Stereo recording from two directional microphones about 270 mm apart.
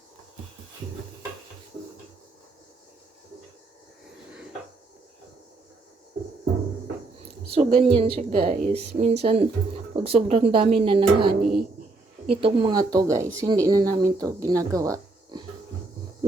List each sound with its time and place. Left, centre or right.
7.5 s speech: right